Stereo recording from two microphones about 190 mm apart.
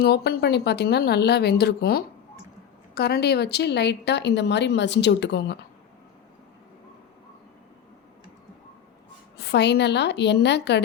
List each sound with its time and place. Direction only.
0.0 s speech: 55° left (ahead or behind)
9.5 s speech: 60° left (ahead or behind)